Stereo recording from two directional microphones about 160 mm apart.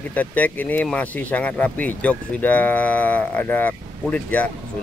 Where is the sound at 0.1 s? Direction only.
10° left (ahead or behind).